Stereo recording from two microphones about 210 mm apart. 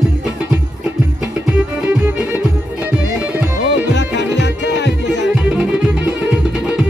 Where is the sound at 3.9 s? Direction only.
55° left (ahead or behind).